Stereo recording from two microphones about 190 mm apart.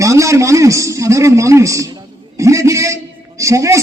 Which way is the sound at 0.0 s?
15° right (ahead or behind).